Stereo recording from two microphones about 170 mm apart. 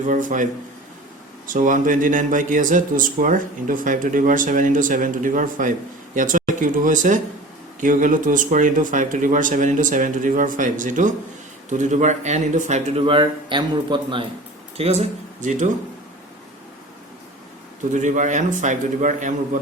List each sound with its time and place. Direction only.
0.0 s speech: 50° right (ahead or behind)
1.5 s speech: 50° right (ahead or behind)
13.0 s a man's voice: 30° right (ahead or behind)
14.8 s speech: 40° right (ahead or behind)
17.9 s speech: 45° right (ahead or behind)